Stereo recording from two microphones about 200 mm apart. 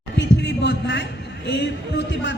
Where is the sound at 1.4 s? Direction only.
60° left (ahead or behind).